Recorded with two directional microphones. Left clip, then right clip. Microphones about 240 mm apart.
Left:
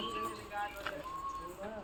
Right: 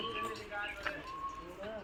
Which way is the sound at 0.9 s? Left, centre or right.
Left.